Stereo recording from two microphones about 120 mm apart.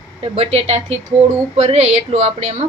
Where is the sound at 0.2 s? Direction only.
60° right (ahead or behind).